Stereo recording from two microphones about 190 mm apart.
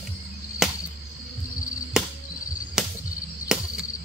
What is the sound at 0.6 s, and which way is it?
Chop, centre (ahead or behind).